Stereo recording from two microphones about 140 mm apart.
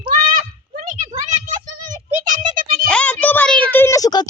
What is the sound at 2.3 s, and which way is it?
Music, 75° right (ahead or behind).